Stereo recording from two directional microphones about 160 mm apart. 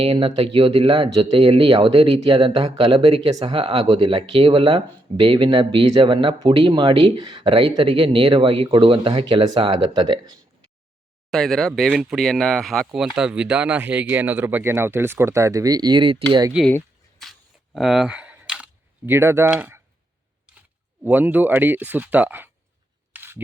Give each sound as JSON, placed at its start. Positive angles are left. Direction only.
{"t": 0.0, "sound": "speech", "side_deg": -35}
{"t": 11.3, "sound": "speech", "side_deg": 0}
{"t": 16.6, "sound": "a sound", "side_deg": 5}
{"t": 17.7, "sound": "camera", "side_deg": 0}
{"t": 21.0, "sound": "speech", "side_deg": -10}
{"t": 23.1, "sound": "a sound", "side_deg": -15}